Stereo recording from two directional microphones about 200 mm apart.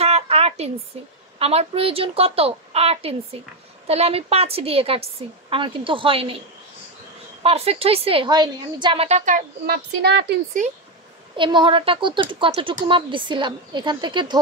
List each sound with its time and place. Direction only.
0.0 s a sound: 30° right (ahead or behind)
1.4 s a woman's voice: 30° right (ahead or behind)
7.4 s a woman's voice: 30° right (ahead or behind); by 10.4 s 55° right (ahead or behind)
11.3 s a woman's voice: 25° right (ahead or behind)